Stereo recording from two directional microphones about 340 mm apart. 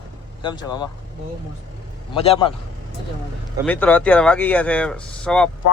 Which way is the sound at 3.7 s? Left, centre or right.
Centre.